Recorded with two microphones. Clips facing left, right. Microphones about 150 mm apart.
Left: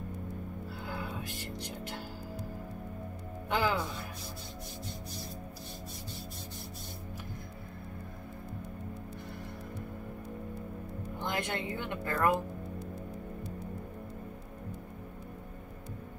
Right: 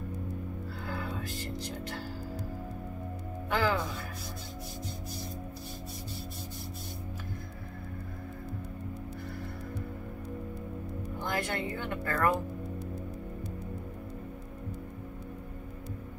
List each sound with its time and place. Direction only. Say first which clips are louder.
3.4 s music: right 1 dB; 15° left (ahead or behind)
11.1 s speech: right 1 dB; 20° left (ahead or behind)